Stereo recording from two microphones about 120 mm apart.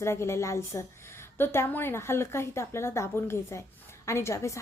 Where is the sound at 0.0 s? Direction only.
20° left (ahead or behind).